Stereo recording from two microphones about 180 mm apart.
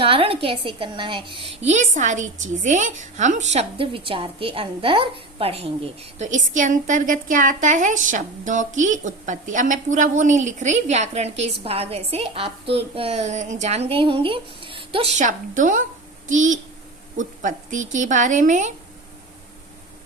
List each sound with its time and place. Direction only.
0.0 s a woman's voice: 30° right (ahead or behind)
15.2 s a woman's voice: 45° right (ahead or behind)